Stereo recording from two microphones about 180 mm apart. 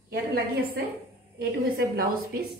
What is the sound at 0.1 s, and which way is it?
A woman's voice, 60° right (ahead or behind).